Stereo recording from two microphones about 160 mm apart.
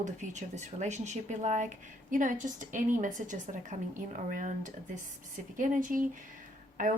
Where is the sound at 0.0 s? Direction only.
50° right (ahead or behind).